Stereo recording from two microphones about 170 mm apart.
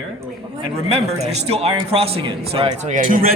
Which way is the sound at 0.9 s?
40° right (ahead or behind).